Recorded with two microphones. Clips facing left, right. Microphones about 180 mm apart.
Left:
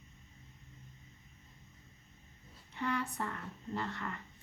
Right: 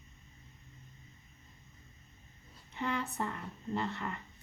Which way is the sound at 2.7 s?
20° right (ahead or behind).